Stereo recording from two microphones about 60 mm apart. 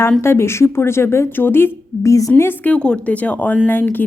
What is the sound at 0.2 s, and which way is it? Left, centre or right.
A woman's voice, left.